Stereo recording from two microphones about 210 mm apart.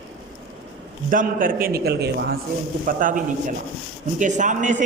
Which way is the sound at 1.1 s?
40° right (ahead or behind).